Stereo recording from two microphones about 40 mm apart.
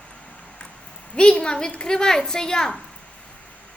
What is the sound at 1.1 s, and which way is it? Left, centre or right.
A woman's voice, left.